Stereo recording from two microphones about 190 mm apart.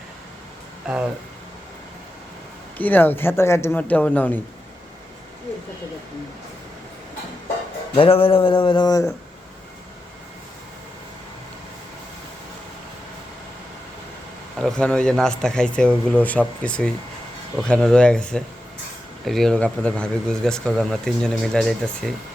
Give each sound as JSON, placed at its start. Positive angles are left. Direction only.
{"t": 0.9, "sound": "speech", "side_deg": -5}
{"t": 2.7, "sound": "speech", "side_deg": 10}
{"t": 7.9, "sound": "speech", "side_deg": 30}
{"t": 14.6, "sound": "speech", "side_deg": 5}